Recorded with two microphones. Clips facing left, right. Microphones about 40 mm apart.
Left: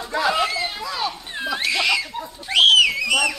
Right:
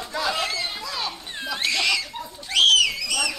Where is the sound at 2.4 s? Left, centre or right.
Left.